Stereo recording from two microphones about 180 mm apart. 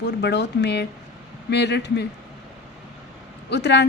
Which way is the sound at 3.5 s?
70° left (ahead or behind).